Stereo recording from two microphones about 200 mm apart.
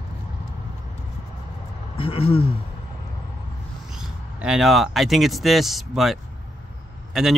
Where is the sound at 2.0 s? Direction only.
30° left (ahead or behind).